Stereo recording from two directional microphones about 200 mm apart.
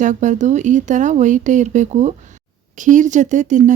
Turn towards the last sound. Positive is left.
turn(degrees=-40)  # may be behind; listen again after turning